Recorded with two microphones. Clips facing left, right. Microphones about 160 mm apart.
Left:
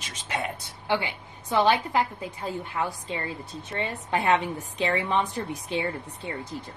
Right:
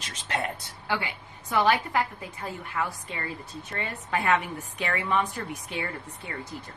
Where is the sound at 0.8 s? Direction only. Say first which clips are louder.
Left 4 dB; 25° left (ahead or behind).